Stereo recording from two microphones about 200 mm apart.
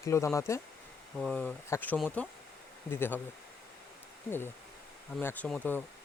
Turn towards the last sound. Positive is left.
turn(degrees=10)  # may be behind; listen again after turning